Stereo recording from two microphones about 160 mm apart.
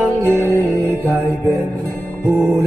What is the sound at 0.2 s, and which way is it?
Music, 15° right (ahead or behind).